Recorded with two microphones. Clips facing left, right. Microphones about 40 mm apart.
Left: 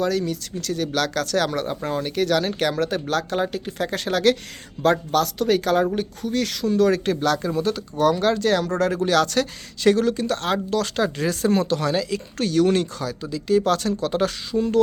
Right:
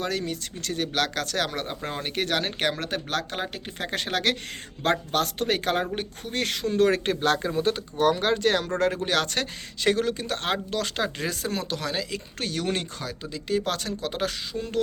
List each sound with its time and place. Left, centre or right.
0.0 s speech: right
0.9 s speech: centre
4.8 s speech: right; by 14.8 s centre